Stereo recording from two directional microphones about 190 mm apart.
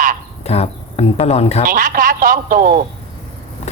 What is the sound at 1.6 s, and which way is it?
Speech, 45° right (ahead or behind).